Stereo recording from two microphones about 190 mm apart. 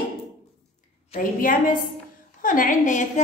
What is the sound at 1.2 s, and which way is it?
Music, 45° left (ahead or behind).